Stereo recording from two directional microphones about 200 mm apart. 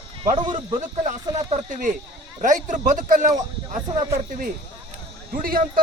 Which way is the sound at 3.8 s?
20° right (ahead or behind).